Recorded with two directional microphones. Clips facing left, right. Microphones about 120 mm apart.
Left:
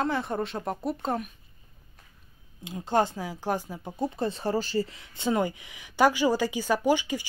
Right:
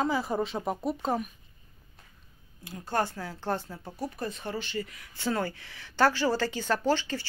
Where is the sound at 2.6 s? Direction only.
20° left (ahead or behind).